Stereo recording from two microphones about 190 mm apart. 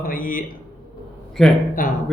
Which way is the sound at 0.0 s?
45° left (ahead or behind).